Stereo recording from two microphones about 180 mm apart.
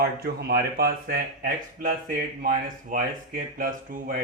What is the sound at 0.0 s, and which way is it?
Speech, 60° right (ahead or behind).